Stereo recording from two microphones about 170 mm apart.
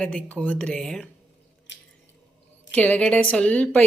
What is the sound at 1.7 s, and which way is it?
Drip, 90° left.